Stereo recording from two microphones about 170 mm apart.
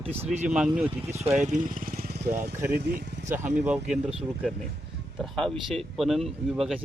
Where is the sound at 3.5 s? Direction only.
45° right (ahead or behind).